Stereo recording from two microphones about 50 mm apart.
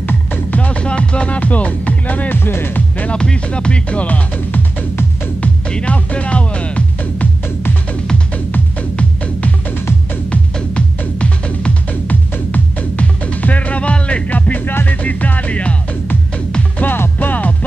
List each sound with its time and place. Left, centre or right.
0.0 s music: left
0.6 s music: left
2.3 s speech: left
3.0 s speech: left
4.5 s music: left
5.7 s speech: left
8.9 s music: left
16.7 s music: left